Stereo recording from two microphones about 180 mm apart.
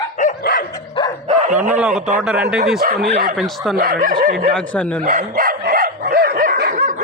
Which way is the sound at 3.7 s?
60° right (ahead or behind).